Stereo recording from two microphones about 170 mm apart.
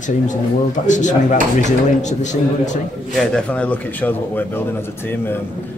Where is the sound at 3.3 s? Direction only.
5° left (ahead or behind).